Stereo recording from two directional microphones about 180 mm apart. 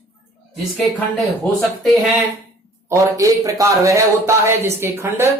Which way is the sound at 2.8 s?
15° right (ahead or behind).